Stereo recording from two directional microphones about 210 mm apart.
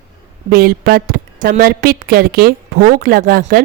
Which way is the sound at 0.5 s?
45° right (ahead or behind).